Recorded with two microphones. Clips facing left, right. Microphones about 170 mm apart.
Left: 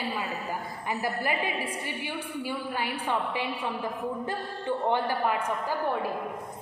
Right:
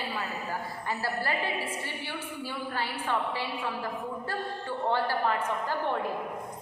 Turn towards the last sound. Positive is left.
turn(degrees=10)  # may be behind; listen again after turning